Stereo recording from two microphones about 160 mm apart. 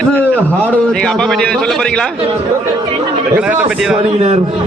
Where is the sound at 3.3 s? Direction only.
10° right (ahead or behind).